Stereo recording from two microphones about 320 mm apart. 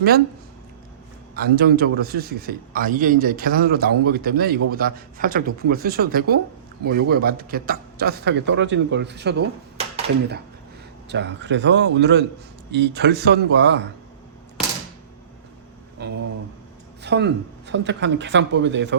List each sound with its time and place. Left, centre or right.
1.4 s a man's voice: right
11.1 s a man's voice: right
16.0 s a sound: right
17.0 s a man's voice: right